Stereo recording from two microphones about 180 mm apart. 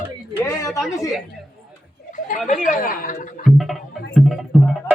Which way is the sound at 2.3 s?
45° left (ahead or behind).